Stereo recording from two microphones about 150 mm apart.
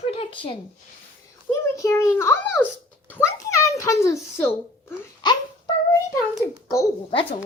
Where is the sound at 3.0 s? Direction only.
10° left (ahead or behind).